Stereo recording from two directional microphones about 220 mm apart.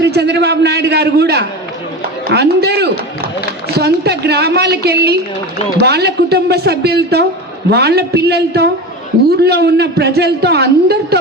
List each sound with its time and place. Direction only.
0.0 s a man's voice: 50° right (ahead or behind)